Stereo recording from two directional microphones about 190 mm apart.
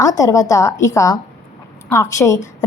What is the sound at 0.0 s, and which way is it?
A woman's voice, 15° left (ahead or behind).